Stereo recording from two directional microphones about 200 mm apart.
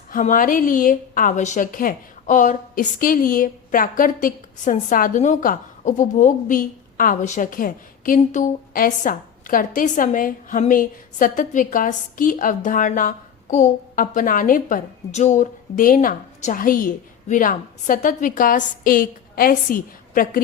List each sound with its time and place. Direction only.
0.1 s a woman's voice: 40° left (ahead or behind)